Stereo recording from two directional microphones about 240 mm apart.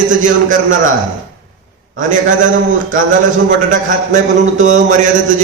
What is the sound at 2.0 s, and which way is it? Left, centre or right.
Speech, right.